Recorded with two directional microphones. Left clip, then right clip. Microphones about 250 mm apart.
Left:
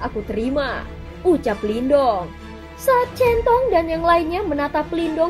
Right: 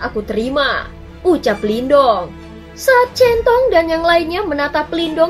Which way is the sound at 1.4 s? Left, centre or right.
Left.